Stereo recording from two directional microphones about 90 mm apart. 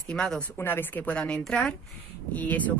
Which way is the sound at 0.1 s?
10° left (ahead or behind).